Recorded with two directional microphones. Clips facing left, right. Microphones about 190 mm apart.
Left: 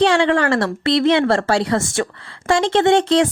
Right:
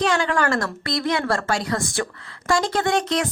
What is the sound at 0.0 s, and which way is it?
A woman's voice, 30° left (ahead or behind).